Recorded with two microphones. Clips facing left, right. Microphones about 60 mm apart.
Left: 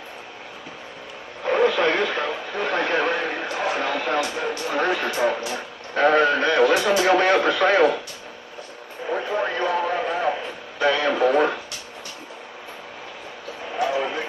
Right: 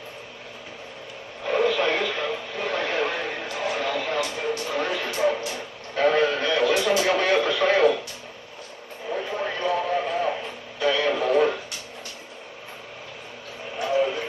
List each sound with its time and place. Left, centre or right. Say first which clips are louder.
1.5 s speech: left 3 dB; left
9.0 s radio: left 4 dB; left
13.9 s a sound: right 2 dB; left